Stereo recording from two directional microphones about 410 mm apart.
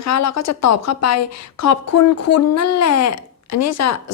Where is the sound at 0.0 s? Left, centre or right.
Left.